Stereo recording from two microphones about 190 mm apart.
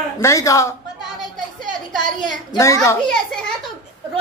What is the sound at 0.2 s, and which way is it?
Speech, 15° left (ahead or behind).